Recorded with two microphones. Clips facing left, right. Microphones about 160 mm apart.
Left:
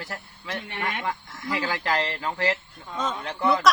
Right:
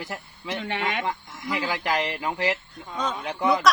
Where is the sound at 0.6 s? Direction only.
90° right.